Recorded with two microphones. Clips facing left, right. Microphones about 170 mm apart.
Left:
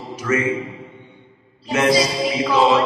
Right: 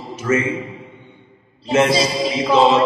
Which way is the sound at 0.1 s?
25° right (ahead or behind).